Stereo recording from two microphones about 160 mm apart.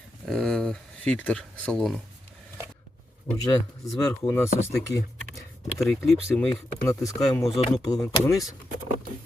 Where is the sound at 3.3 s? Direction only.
15° left (ahead or behind).